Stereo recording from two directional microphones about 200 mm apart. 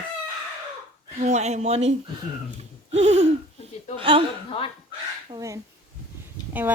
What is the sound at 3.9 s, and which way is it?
Speech, 25° right (ahead or behind).